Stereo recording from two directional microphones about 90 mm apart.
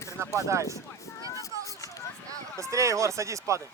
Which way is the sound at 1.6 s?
35° left (ahead or behind).